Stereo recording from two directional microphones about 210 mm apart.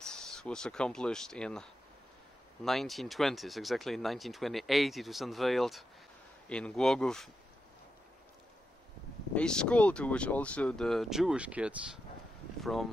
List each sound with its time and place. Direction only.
0.0 s speech: 5° left (ahead or behind)
9.3 s speech: 5° left (ahead or behind)